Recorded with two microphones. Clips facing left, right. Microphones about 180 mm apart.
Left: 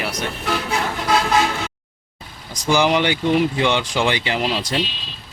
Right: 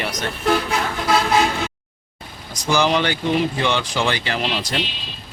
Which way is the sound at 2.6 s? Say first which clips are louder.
Left 1 dB; 15° left (ahead or behind).